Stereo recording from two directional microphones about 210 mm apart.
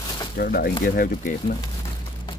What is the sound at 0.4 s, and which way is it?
Speech, 45° left (ahead or behind).